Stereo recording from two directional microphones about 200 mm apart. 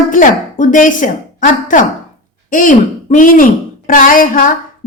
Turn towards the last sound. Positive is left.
turn(degrees=45)  # may be behind; listen again after turning